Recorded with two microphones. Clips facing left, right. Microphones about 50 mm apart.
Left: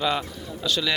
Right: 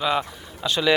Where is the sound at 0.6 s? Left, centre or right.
Right.